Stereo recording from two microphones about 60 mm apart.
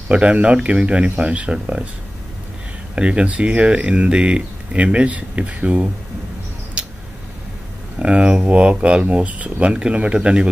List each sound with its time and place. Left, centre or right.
0.1 s speech: right
3.0 s speech: centre
8.0 s speech: centre
9.7 s a man's voice: centre